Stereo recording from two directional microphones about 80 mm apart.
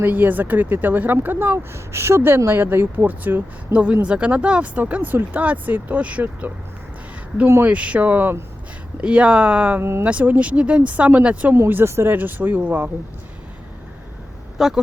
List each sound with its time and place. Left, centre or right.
0.0 s speech: right
7.4 s speech: right
7.7 s speech: centre
9.0 s speech: centre
11.5 s speech: right
14.6 s speech: centre